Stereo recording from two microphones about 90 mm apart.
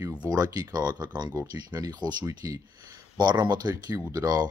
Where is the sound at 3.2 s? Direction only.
50° right (ahead or behind).